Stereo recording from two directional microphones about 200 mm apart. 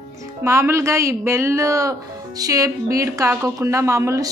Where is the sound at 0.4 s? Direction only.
15° right (ahead or behind).